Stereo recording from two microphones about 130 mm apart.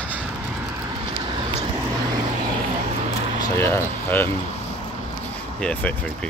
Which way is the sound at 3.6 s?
15° left (ahead or behind).